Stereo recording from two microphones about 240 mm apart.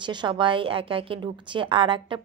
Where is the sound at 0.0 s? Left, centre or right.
Centre.